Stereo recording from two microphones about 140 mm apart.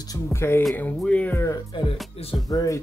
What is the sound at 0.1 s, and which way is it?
Speech, 20° left (ahead or behind).